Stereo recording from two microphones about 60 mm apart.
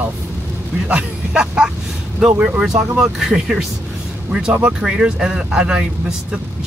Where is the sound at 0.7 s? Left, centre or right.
Centre.